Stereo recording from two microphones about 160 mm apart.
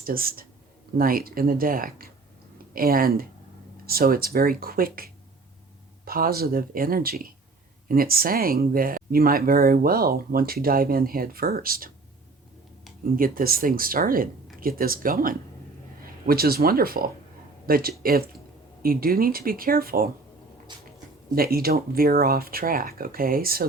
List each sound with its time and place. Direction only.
0.0 s speech: 65° right (ahead or behind)
13.1 s speech: 65° right (ahead or behind)
20.7 s a sound: 30° right (ahead or behind)
21.3 s speech: 70° right (ahead or behind)